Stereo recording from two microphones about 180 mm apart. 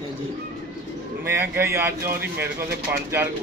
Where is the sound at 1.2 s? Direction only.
10° right (ahead or behind).